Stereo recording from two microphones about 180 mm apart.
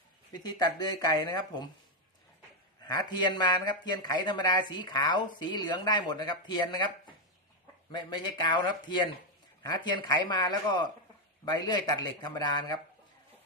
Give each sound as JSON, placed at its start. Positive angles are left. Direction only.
{"t": 0.4, "sound": "speech", "side_deg": 25}
{"t": 2.8, "sound": "speech", "side_deg": 25}
{"t": 7.9, "sound": "speech", "side_deg": 25}